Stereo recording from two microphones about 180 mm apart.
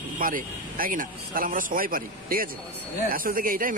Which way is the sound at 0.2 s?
50° right (ahead or behind).